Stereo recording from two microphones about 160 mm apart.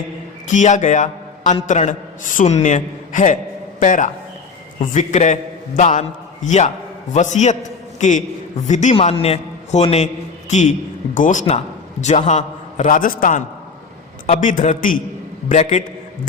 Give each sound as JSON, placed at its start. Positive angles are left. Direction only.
{"t": 0.4, "sound": "a man's voice", "side_deg": 50}